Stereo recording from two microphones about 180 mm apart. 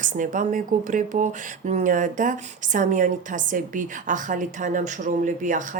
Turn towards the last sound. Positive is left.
turn(degrees=-45)  # may be behind; listen again after turning